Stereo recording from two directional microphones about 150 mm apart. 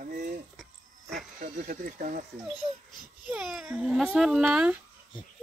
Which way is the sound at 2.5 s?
30° left (ahead or behind).